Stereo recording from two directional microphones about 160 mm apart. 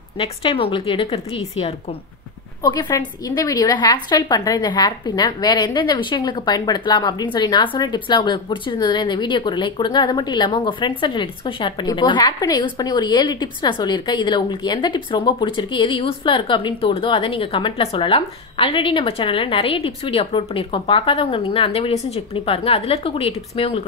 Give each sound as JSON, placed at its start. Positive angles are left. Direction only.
{"t": 0.2, "sound": "a woman's voice", "side_deg": 35}
{"t": 2.6, "sound": "a woman's voice", "side_deg": 25}